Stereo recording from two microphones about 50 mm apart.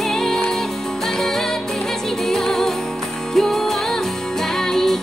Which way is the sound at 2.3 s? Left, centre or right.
Centre.